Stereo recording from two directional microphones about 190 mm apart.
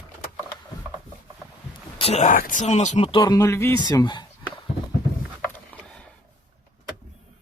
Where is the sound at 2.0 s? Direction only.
35° left (ahead or behind).